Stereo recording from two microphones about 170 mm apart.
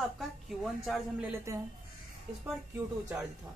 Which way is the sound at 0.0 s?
Centre (ahead or behind).